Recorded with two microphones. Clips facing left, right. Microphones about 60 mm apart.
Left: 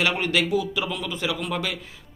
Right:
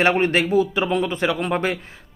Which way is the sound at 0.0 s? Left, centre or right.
Right.